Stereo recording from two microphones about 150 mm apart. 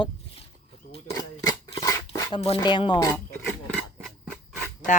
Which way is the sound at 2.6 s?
30° left (ahead or behind).